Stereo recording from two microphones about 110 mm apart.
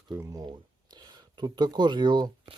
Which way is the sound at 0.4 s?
40° right (ahead or behind).